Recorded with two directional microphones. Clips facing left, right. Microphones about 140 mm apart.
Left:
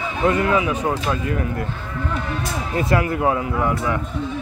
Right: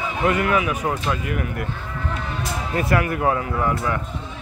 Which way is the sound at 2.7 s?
25° left (ahead or behind).